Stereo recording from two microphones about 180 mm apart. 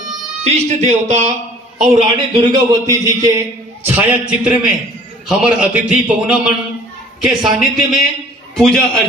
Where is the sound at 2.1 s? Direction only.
25° right (ahead or behind).